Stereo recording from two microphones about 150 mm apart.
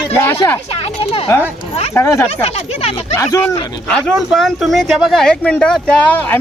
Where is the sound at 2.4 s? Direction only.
45° left (ahead or behind).